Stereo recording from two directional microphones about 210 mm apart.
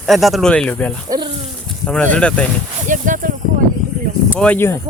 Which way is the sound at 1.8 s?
5° left (ahead or behind).